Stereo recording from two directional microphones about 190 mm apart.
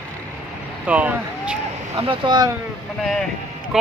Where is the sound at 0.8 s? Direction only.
10° right (ahead or behind).